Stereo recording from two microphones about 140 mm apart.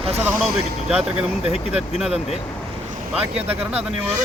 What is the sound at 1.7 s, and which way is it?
Speech, 5° right (ahead or behind).